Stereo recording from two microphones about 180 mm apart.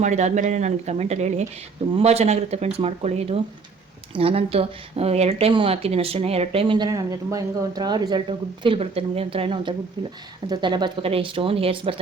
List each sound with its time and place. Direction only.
0.0 s speech: 40° right (ahead or behind)